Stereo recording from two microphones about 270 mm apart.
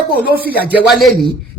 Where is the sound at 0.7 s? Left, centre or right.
Centre.